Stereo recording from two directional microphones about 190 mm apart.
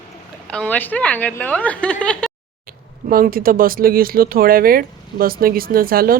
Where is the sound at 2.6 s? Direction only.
50° right (ahead or behind).